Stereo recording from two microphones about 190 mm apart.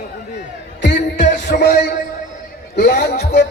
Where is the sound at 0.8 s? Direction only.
65° left (ahead or behind).